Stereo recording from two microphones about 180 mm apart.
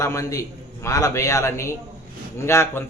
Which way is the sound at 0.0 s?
15° left (ahead or behind).